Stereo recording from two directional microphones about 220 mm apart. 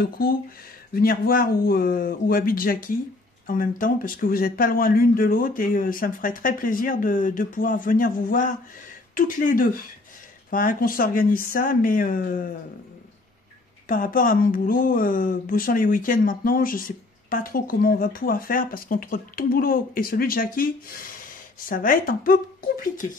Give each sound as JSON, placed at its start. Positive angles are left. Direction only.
{"t": 0.0, "sound": "speech", "side_deg": 40}
{"t": 13.8, "sound": "speech", "side_deg": 40}